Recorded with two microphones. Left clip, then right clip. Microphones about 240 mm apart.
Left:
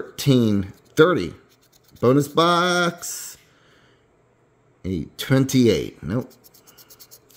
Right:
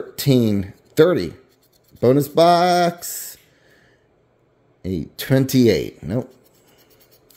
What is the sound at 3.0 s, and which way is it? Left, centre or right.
Speech, right.